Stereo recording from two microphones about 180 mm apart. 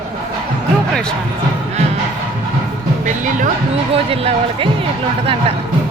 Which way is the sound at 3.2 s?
45° right (ahead or behind).